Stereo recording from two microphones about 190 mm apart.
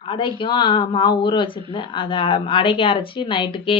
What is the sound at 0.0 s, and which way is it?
Speech, 25° left (ahead or behind).